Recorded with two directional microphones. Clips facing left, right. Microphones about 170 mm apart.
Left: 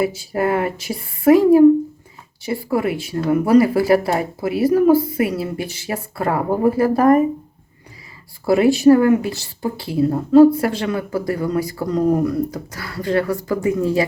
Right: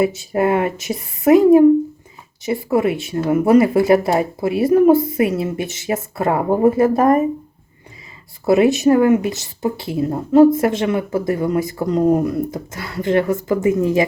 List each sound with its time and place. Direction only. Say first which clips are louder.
0.0 s speech: right 3 dB; 25° right (ahead or behind)
8.4 s speech: left 1 dB; 20° right (ahead or behind)